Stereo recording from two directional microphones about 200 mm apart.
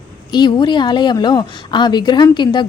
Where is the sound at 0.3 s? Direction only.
20° left (ahead or behind).